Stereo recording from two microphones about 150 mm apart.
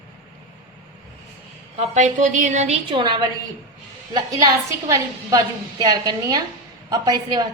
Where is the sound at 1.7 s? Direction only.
40° right (ahead or behind).